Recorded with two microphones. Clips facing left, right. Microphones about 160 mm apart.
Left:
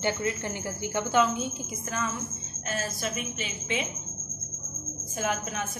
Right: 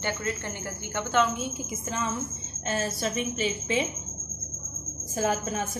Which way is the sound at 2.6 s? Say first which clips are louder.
Right 3 dB; 30° right (ahead or behind).